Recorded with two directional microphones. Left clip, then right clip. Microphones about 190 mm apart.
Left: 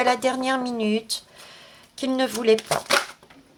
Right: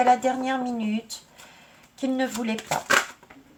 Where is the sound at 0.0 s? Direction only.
50° left (ahead or behind).